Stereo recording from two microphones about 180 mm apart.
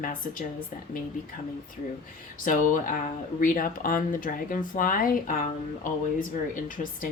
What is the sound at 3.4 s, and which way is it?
A woman's voice, 50° left (ahead or behind).